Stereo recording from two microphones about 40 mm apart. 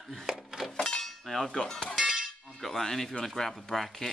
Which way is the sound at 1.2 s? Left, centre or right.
Centre.